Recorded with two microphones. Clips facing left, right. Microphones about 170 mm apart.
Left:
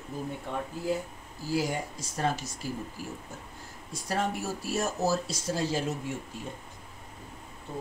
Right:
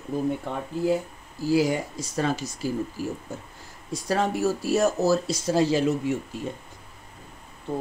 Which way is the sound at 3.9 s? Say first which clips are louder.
Right 6 dB; 90° right.